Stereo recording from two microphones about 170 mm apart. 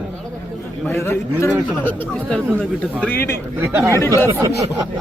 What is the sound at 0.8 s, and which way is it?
A man's voice, 15° left (ahead or behind).